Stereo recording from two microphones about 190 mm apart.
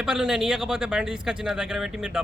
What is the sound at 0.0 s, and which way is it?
A man's voice, 5° right (ahead or behind).